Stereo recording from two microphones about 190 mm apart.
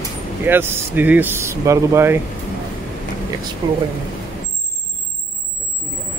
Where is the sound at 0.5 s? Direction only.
10° right (ahead or behind).